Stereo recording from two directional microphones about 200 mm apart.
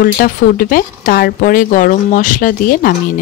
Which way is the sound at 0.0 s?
45° left (ahead or behind).